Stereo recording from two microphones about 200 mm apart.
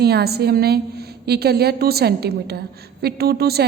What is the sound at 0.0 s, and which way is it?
A woman's voice, 55° right (ahead or behind).